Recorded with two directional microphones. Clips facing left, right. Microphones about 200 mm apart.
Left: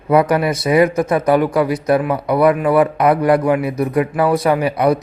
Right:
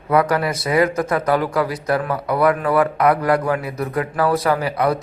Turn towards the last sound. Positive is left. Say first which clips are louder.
# left 4 dB
turn(degrees=20)  # may be behind; listen again after turning